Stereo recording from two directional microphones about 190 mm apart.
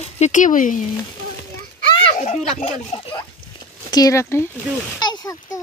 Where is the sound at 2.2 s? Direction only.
40° left (ahead or behind).